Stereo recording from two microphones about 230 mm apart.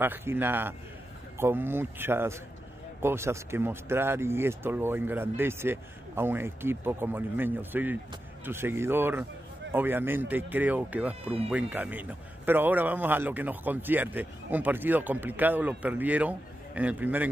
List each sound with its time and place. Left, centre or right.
0.0 s a man's voice: centre
11.2 s speech: right
11.5 s a man's voice: centre